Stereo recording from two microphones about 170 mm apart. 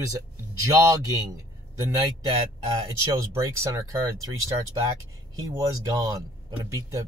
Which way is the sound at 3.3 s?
20° right (ahead or behind).